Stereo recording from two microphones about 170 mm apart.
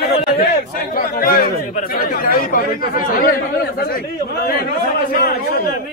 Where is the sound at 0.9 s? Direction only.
60° left (ahead or behind).